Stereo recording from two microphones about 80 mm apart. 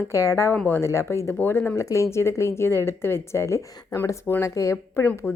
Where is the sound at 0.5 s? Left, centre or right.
Left.